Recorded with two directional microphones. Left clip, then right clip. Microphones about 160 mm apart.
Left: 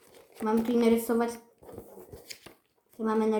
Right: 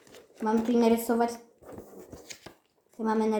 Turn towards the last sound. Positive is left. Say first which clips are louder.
# even
turn(degrees=-5)  # may be behind; listen again after turning